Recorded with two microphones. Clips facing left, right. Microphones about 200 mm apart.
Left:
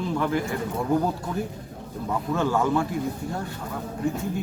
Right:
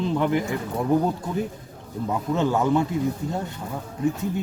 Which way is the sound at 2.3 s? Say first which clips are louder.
Right 2 dB; 20° right (ahead or behind).